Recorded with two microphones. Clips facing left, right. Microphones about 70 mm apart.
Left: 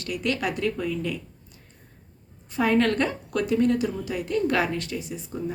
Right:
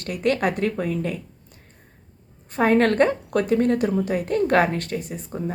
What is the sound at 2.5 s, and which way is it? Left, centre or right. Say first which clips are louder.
Speech: right 4 dB; right.